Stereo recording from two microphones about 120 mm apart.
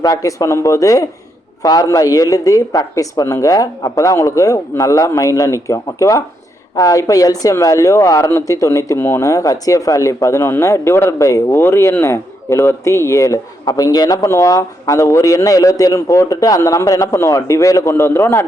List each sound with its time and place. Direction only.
0.0 s speech: 30° left (ahead or behind)